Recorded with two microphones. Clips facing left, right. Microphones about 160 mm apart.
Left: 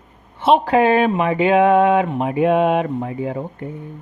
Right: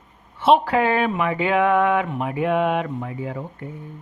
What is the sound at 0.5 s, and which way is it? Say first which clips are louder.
Speech: left 5 dB; 20° left (ahead or behind).